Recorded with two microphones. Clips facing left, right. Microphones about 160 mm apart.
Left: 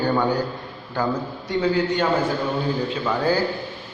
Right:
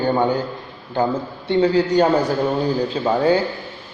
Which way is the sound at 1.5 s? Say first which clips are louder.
Right 5 dB; 35° right (ahead or behind).